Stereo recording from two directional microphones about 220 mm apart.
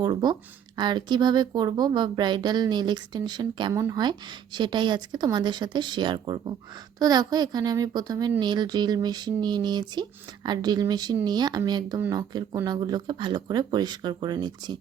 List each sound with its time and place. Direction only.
0.0 s a child's voice: 20° right (ahead or behind)